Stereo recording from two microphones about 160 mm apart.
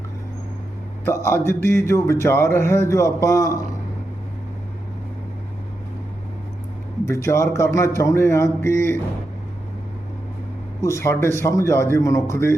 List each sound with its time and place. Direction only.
1.0 s speech: 15° left (ahead or behind)
7.1 s speech: 15° left (ahead or behind)
10.8 s speech: 15° left (ahead or behind)